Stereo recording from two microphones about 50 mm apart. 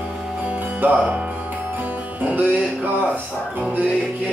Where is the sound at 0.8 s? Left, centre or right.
Right.